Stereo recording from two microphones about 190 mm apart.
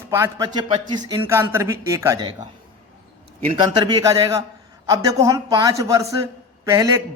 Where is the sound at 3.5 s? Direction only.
25° right (ahead or behind).